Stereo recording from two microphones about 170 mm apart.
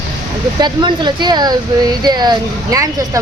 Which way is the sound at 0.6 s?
25° right (ahead or behind).